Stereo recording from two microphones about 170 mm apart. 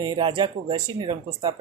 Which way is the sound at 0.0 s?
25° right (ahead or behind).